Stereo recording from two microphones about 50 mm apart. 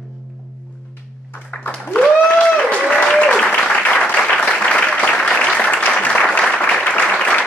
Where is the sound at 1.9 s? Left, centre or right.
Left.